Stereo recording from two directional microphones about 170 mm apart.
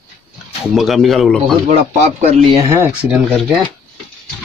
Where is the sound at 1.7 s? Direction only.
40° right (ahead or behind).